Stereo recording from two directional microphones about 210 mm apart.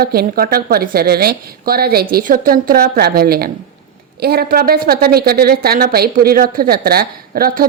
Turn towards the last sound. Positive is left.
turn(degrees=-45)  # may be behind; listen again after turning